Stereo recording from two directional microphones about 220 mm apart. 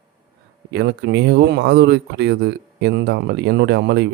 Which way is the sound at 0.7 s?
50° right (ahead or behind).